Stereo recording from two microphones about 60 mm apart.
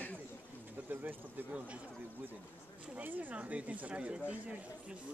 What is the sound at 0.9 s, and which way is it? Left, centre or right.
Speech, right.